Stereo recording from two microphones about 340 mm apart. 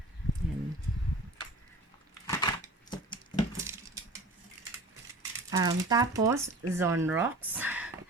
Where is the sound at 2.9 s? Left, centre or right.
Centre.